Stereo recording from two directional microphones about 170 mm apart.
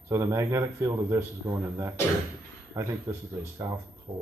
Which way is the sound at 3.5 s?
20° right (ahead or behind).